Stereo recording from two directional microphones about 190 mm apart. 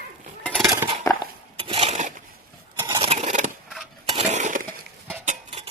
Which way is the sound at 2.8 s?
25° right (ahead or behind).